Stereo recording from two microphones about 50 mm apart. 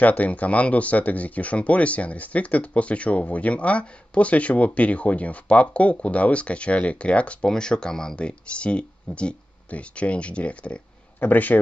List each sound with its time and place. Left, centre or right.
0.0 s speech: left; by 8.2 s centre
8.2 s speech: left
11.1 s speech: left